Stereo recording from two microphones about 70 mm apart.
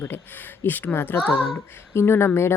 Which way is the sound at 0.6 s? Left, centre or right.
Left.